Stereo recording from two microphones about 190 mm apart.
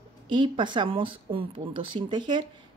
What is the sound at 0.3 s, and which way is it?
Speech, 25° right (ahead or behind).